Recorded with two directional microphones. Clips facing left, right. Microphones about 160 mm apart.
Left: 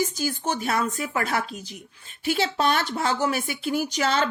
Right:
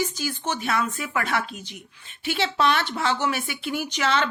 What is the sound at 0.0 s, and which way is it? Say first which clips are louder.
Speech: left 2 dB; 40° left (ahead or behind).